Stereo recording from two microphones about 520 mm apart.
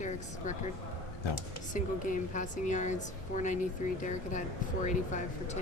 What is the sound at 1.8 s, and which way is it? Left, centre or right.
A woman's voice, centre.